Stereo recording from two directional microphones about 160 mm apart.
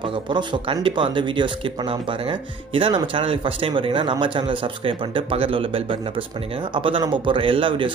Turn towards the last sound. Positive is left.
turn(degrees=-30)  # may be behind; listen again after turning